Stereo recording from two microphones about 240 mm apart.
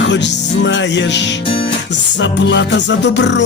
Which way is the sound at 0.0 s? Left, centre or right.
Left.